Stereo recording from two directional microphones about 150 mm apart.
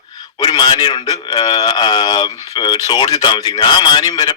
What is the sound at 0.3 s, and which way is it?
A man's voice, 30° left (ahead or behind).